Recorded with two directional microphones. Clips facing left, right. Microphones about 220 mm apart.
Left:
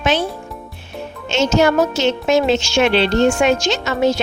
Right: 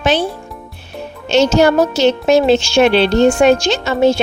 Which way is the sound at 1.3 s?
35° right (ahead or behind).